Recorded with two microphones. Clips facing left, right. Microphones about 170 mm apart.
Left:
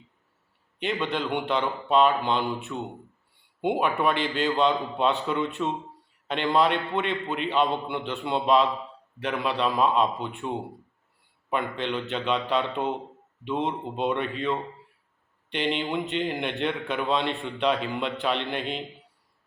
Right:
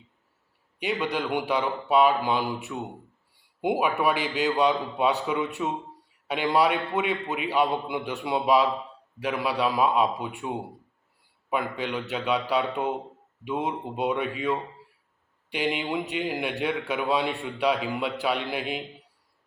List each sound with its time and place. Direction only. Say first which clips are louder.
0.8 s a man's voice: even; 5° right (ahead or behind)
3.6 s a man's voice: even; 10° right (ahead or behind)